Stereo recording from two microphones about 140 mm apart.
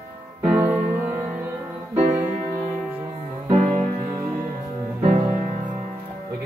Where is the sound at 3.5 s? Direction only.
60° right (ahead or behind).